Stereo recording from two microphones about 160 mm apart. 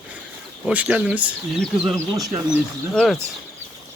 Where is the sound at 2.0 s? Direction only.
20° right (ahead or behind).